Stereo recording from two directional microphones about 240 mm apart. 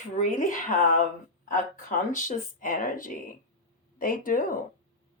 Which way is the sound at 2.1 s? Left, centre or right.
Left.